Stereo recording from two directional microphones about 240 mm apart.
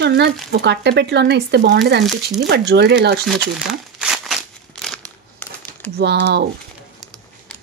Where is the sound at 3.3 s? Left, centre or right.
Centre.